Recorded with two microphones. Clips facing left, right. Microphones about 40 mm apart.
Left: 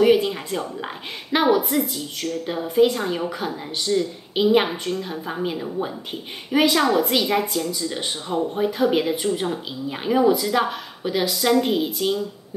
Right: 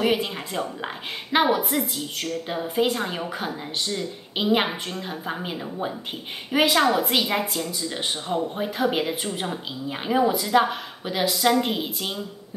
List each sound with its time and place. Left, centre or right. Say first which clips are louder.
0.0 s a woman's voice: left 6 dB; centre
1.3 s a woman's voice: left 2 dB; centre
2.4 s a woman's voice: left 6 dB; centre
3.9 s a woman's voice: left 11 dB; centre
4.4 s a woman's voice: left 4 dB; centre